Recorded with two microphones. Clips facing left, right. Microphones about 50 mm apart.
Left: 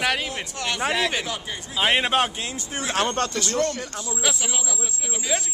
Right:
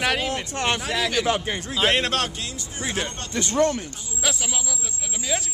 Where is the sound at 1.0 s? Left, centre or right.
Centre.